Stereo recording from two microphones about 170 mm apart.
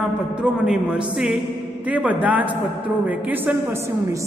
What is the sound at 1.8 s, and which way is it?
A woman's voice, 10° right (ahead or behind).